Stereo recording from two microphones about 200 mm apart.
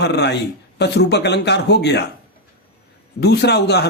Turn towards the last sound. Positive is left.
turn(degrees=55)  # may be behind; listen again after turning